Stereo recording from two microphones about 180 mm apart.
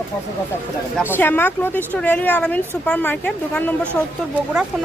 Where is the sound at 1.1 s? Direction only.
10° left (ahead or behind).